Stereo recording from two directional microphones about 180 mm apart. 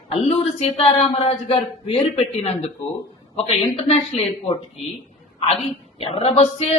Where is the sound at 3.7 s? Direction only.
35° left (ahead or behind).